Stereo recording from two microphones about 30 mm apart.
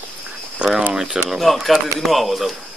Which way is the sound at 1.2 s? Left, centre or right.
Centre.